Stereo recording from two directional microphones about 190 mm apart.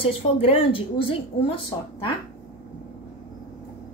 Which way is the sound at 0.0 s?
30° left (ahead or behind).